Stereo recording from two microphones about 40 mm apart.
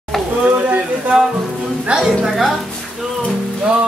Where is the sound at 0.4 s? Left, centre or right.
Right.